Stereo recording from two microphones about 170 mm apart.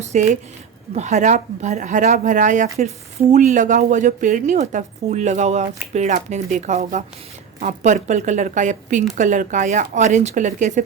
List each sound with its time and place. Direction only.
0.0 s a woman's voice: 45° right (ahead or behind)